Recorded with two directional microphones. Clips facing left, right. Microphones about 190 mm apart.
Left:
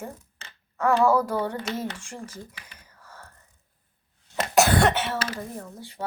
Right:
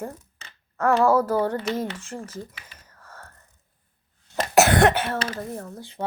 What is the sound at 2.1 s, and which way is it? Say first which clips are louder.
Speech: right 4 dB; 10° left (ahead or behind).